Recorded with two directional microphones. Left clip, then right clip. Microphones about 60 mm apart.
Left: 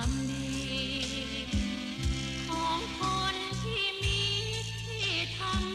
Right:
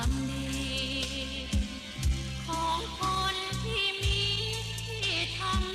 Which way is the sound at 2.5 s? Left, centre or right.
Right.